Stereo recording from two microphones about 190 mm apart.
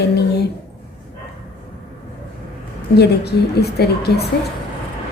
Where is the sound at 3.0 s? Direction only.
60° left (ahead or behind).